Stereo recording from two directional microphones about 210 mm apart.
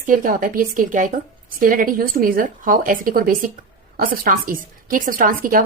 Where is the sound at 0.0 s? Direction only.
40° right (ahead or behind).